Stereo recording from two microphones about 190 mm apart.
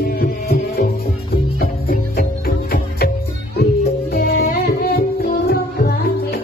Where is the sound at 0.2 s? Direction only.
55° left (ahead or behind).